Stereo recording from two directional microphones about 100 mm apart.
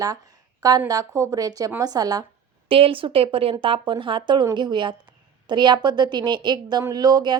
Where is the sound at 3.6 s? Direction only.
55° right (ahead or behind).